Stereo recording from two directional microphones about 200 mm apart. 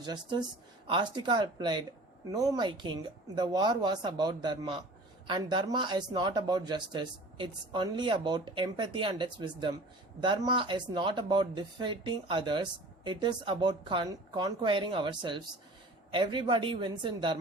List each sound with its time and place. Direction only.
0.0 s speech: 20° right (ahead or behind)